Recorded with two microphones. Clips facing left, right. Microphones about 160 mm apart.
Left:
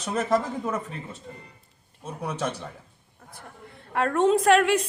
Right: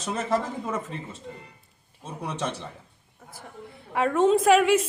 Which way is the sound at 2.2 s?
10° left (ahead or behind).